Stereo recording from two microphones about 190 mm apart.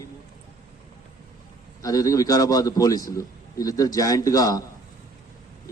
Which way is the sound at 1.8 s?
20° left (ahead or behind).